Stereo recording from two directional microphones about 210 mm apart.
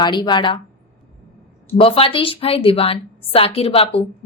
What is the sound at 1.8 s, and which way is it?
A woman's voice, 25° left (ahead or behind).